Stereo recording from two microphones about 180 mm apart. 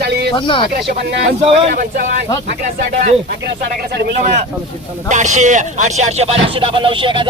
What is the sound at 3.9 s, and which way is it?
Speech, 65° right (ahead or behind).